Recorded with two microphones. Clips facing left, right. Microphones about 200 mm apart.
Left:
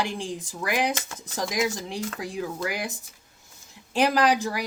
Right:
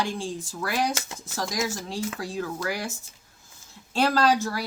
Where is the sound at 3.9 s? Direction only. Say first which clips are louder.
Even; 15° left (ahead or behind).